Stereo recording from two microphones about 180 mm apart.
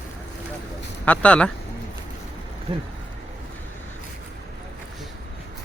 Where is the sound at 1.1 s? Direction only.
5° left (ahead or behind).